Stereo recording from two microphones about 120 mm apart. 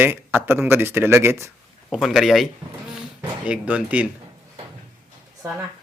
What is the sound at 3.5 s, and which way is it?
Speech, 10° right (ahead or behind).